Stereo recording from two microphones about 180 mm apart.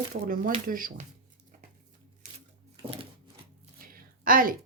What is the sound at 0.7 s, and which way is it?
Speech, 50° right (ahead or behind).